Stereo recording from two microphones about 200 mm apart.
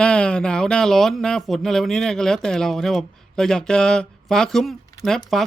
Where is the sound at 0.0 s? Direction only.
5° left (ahead or behind).